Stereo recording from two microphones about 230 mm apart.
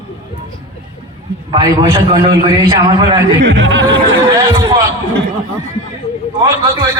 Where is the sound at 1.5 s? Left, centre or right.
Right.